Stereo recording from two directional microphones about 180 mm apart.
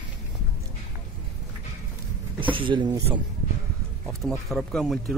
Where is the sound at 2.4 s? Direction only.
30° right (ahead or behind).